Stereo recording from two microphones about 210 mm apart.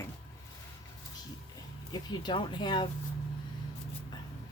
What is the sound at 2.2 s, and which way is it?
Speech, 20° left (ahead or behind).